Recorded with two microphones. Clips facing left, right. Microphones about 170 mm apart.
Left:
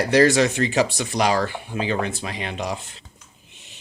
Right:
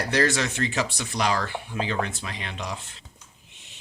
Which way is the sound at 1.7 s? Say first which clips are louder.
Left 4 dB; 15° left (ahead or behind).